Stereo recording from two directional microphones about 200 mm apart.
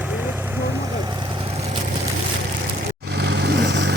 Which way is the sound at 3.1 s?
55° right (ahead or behind).